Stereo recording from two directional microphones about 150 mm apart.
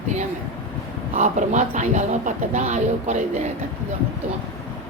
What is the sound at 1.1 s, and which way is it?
Speech, 55° right (ahead or behind).